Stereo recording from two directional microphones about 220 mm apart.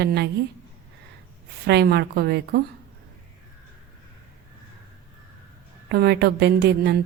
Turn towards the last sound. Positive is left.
turn(degrees=-50)  # may be behind; listen again after turning